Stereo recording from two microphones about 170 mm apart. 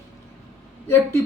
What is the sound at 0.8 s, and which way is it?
Speech, 15° left (ahead or behind).